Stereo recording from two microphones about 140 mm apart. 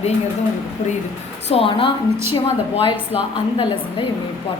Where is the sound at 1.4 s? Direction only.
45° left (ahead or behind).